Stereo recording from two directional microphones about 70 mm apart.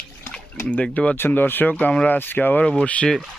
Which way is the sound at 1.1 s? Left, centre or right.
Left.